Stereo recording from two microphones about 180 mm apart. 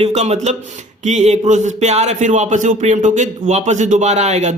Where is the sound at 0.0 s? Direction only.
35° right (ahead or behind).